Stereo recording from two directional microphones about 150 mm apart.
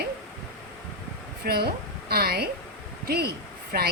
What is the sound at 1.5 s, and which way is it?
Speech, 90° right.